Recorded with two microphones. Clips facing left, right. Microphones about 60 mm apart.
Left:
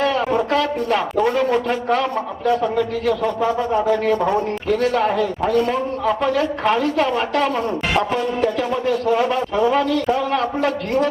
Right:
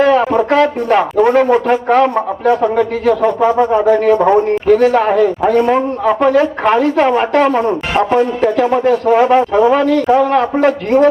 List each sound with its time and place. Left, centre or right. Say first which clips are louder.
0.0 s a woman's voice: right 8 dB; right